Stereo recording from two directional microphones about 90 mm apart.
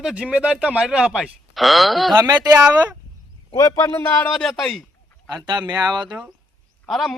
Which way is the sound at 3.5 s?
45° left (ahead or behind).